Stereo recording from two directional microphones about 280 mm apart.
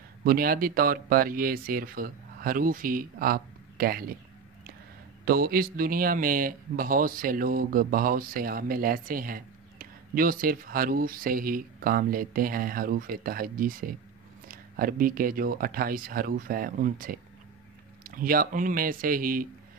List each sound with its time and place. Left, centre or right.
0.2 s speech: right
5.2 s speech: right